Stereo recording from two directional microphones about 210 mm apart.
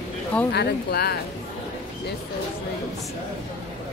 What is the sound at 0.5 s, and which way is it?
Speech, 50° left (ahead or behind).